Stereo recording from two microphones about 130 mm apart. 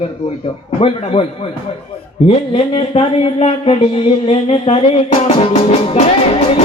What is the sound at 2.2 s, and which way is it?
Speech, 50° left (ahead or behind).